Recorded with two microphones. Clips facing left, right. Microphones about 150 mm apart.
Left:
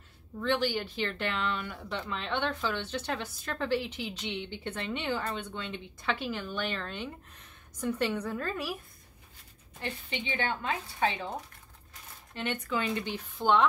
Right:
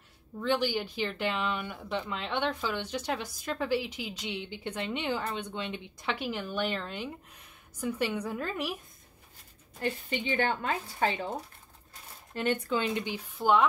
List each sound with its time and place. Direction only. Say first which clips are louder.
0.4 s speech: right 1 dB; 10° right (ahead or behind)
6.2 s speech: right 2 dB; 5° right (ahead or behind)
9.8 s a woman's voice: right 5 dB; 45° right (ahead or behind)
12.4 s speech: right 5 dB; 40° right (ahead or behind)
12.7 s speech: right 1 dB; 20° right (ahead or behind); by 13.7 s 5° right (ahead or behind)